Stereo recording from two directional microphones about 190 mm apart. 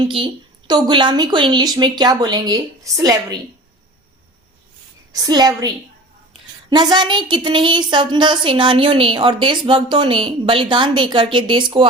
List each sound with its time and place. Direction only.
0.0 s a woman's voice: 25° right (ahead or behind)
5.1 s a woman's voice: 20° right (ahead or behind)